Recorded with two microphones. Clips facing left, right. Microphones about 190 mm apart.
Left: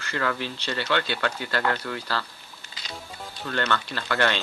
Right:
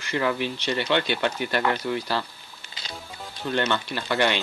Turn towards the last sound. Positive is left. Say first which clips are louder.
# right 2 dB
turn(degrees=-15)  # may be behind; listen again after turning